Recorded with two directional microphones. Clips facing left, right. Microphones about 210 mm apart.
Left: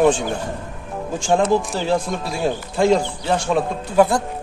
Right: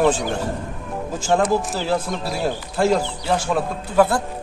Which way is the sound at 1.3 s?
5° left (ahead or behind).